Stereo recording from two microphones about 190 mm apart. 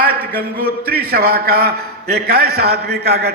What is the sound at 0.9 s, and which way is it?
A man's voice, 55° right (ahead or behind).